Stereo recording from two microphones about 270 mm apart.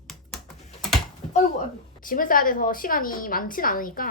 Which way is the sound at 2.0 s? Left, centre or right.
Left.